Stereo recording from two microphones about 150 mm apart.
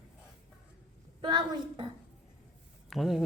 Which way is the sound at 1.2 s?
30° right (ahead or behind).